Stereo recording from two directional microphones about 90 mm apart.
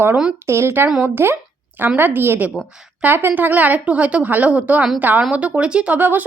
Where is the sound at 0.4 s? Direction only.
30° right (ahead or behind).